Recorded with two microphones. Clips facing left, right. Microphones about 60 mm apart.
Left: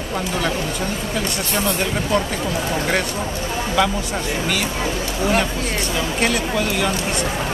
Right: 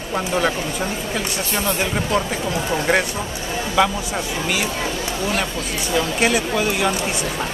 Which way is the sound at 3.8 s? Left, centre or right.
Centre.